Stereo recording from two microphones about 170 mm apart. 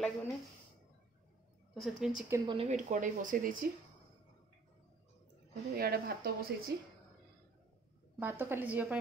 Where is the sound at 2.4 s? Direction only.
30° right (ahead or behind).